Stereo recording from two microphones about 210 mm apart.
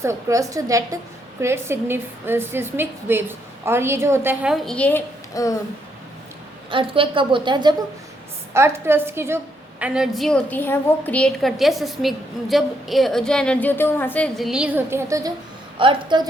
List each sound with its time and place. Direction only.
0.0 s a woman's voice: 15° right (ahead or behind); by 5.5 s 15° left (ahead or behind)
6.7 s a woman's voice: 25° right (ahead or behind)